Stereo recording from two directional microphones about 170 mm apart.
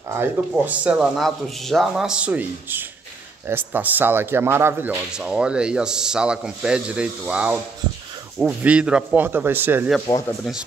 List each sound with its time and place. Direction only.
0.1 s speech: 10° right (ahead or behind)
10.0 s speech: 20° left (ahead or behind)